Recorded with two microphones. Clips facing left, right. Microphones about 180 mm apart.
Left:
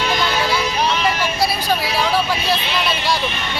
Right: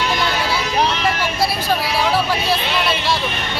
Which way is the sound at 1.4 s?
Centre (ahead or behind).